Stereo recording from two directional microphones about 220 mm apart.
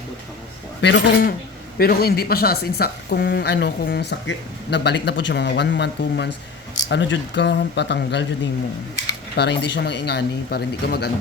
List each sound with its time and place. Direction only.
0.8 s a woman's voice: 50° left (ahead or behind)
9.3 s a woman's voice: 50° left (ahead or behind)